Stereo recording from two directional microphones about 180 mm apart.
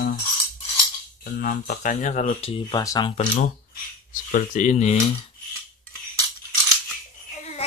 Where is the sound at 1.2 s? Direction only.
55° left (ahead or behind).